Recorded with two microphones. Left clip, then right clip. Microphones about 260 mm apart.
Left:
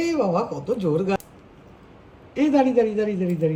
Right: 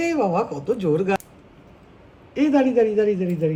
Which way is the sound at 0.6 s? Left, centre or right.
Left.